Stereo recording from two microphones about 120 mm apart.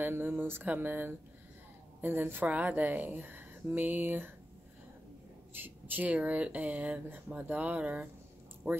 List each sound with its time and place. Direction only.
0.0 s speech: 15° right (ahead or behind)
5.5 s speech: 15° right (ahead or behind)